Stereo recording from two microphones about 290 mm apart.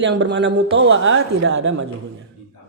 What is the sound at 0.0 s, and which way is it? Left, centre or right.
Speech, right.